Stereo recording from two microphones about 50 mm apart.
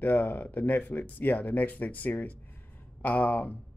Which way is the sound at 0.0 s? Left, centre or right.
Left.